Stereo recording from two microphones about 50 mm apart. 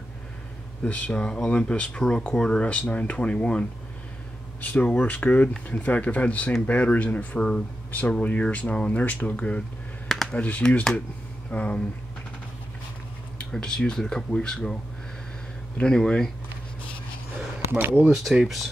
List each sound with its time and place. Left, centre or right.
0.8 s speech: left
10.0 s a sound: centre
10.3 s speech: left
13.4 s speech: centre
15.8 s speech: centre
17.6 s speech: right
18.1 s speech: centre